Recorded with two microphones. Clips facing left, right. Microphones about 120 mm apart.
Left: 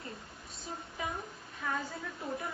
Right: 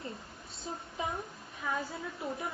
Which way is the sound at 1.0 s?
25° right (ahead or behind).